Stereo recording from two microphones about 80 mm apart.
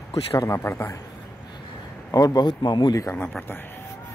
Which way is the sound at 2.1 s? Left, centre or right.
Left.